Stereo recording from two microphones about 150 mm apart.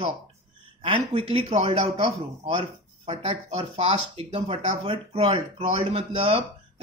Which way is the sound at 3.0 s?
40° right (ahead or behind).